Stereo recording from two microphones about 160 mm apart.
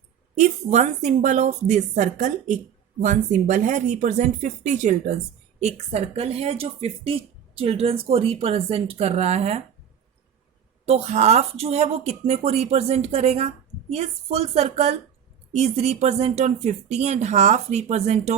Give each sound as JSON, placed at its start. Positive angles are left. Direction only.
{"t": 0.3, "sound": "a woman's voice", "side_deg": -45}
{"t": 10.8, "sound": "a woman's voice", "side_deg": -40}